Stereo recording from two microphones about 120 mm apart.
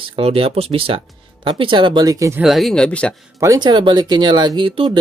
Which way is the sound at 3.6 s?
40° right (ahead or behind).